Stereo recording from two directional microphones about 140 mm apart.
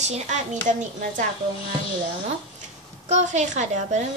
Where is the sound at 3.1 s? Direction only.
55° right (ahead or behind).